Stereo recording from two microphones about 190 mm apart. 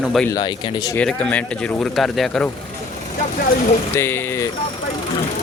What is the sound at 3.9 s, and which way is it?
Speech, 15° left (ahead or behind).